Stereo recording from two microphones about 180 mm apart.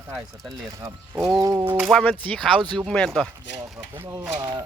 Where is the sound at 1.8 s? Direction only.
5° left (ahead or behind).